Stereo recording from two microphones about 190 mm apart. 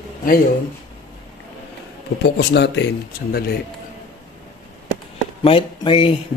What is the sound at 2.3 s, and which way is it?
Speech, 65° left (ahead or behind).